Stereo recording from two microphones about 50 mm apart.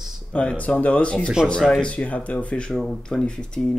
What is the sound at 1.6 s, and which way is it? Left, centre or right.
Speech, centre.